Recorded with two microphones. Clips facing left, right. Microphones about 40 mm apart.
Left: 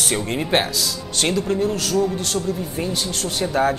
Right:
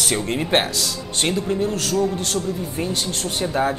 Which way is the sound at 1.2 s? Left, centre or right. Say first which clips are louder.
Left 1 dB; right.